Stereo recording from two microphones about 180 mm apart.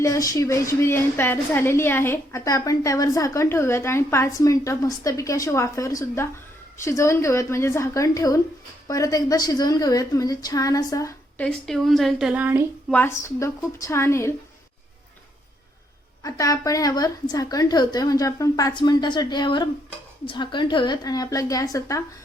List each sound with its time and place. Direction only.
0.0 s a woman's voice: 15° left (ahead or behind)
11.4 s speech: centre (ahead or behind)
12.9 s a woman's voice: 10° left (ahead or behind)
16.2 s a woman's voice: 20° left (ahead or behind)